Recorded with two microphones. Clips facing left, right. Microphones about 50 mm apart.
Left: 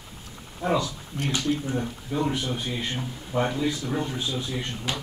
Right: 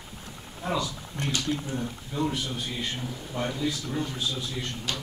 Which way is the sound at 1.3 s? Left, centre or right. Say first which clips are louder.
Left 4 dB; left.